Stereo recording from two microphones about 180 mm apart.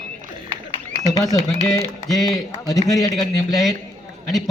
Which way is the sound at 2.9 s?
Centre (ahead or behind).